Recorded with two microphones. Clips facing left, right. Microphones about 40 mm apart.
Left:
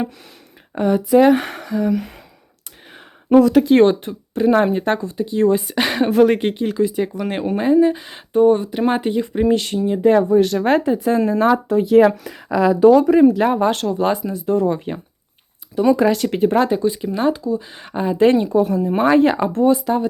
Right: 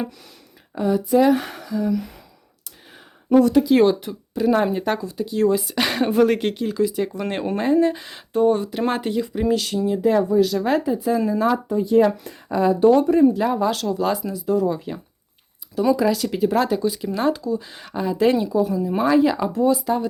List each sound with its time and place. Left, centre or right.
0.8 s speech: left
3.5 s speech: left
4.9 s speech: left
5.8 s a sound: centre
6.1 s speech: left
7.2 s speech: centre
9.5 s speech: left
11.7 s speech: left
13.4 s speech: left
16.0 s speech: left
16.6 s speech: centre; by 18.8 s left
18.8 s speech: left
19.8 s speech: left